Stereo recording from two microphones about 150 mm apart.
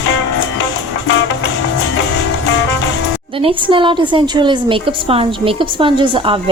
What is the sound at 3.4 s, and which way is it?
A woman's voice, 35° right (ahead or behind).